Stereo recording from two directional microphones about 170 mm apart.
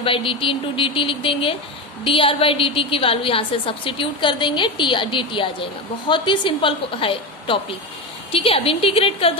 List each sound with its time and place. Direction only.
0.0 s a woman's voice: 30° left (ahead or behind)